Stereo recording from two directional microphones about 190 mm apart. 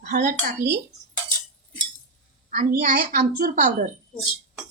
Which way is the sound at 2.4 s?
40° right (ahead or behind).